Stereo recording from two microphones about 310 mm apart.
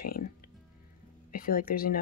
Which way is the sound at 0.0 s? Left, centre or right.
Left.